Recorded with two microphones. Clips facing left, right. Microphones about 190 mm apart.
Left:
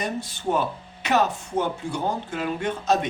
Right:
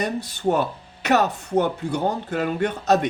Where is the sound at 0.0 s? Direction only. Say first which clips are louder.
Right 4 dB; 65° right (ahead or behind).